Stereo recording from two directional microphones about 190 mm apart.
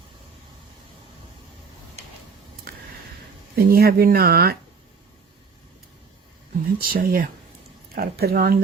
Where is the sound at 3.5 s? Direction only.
50° right (ahead or behind).